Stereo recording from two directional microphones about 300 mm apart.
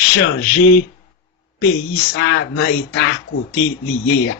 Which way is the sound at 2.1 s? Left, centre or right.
Left.